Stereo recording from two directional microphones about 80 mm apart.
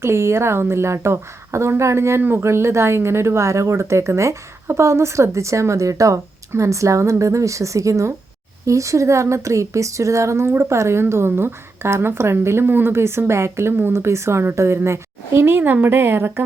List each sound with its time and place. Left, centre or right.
0.0 s a woman's voice: right